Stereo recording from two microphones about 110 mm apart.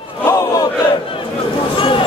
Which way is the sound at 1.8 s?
50° left (ahead or behind).